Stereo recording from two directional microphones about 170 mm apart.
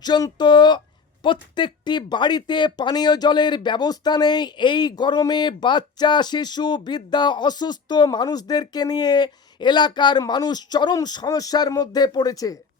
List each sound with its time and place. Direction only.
0.0 s speech: 25° left (ahead or behind)